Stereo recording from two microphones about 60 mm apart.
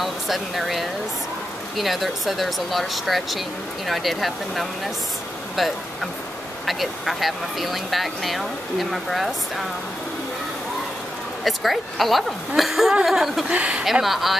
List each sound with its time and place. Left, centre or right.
0.0 s speech: centre
11.4 s speech: centre
13.5 s speech: centre
14.0 s speech: centre